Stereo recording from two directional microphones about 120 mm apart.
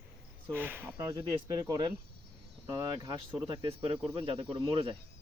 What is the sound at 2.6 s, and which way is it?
Speech, 20° right (ahead or behind).